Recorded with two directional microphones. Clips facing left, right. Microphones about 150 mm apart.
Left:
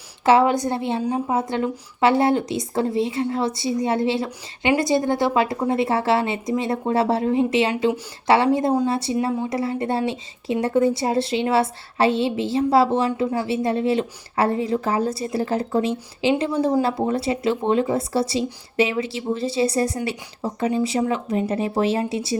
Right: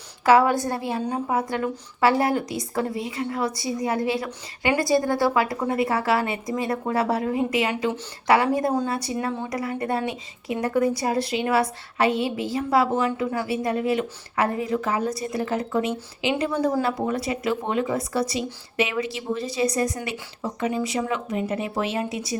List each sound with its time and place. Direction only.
0.3 s speech: 20° left (ahead or behind)